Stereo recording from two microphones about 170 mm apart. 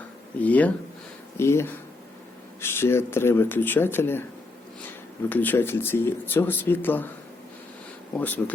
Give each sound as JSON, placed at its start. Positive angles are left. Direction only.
{"t": 0.3, "sound": "speech", "side_deg": 10}
{"t": 5.3, "sound": "speech", "side_deg": 10}
{"t": 8.1, "sound": "speech", "side_deg": 10}